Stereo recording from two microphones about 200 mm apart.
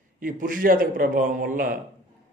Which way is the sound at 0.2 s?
40° right (ahead or behind).